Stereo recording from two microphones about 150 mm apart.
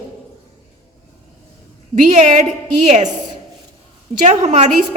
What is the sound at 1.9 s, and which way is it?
Speech, 60° right (ahead or behind).